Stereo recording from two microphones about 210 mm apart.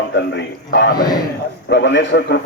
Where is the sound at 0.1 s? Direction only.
60° left (ahead or behind).